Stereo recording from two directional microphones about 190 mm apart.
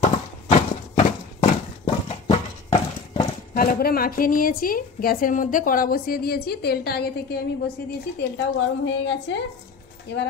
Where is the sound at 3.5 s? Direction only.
50° left (ahead or behind).